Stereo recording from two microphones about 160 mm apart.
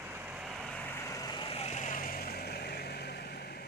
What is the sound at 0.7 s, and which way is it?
Vehicle, 10° left (ahead or behind).